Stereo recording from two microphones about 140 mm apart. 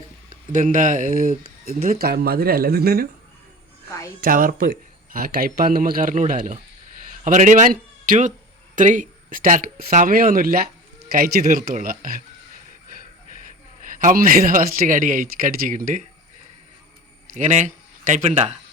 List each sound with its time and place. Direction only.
0.3 s speech: 70° right (ahead or behind); by 3.1 s 90° right
4.2 s a man's voice: 80° right
13.9 s a man's voice: 75° right (ahead or behind)
17.3 s speech: 60° right (ahead or behind)